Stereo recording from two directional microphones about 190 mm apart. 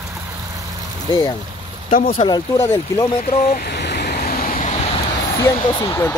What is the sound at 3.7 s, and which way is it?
Vehicle, 60° left (ahead or behind).